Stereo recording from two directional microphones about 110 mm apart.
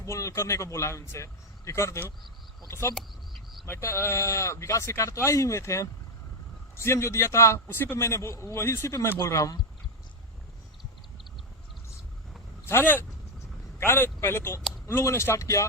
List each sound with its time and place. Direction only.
0.0 s a man's voice: 30° left (ahead or behind)
12.6 s a man's voice: 20° left (ahead or behind)